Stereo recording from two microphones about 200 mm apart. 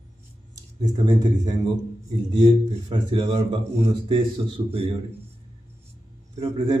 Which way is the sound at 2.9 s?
25° right (ahead or behind).